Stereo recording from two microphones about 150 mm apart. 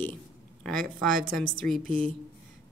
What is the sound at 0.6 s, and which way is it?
Speech, 5° left (ahead or behind).